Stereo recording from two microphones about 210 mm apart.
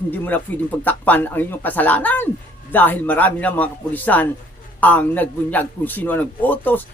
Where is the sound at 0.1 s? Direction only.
10° left (ahead or behind).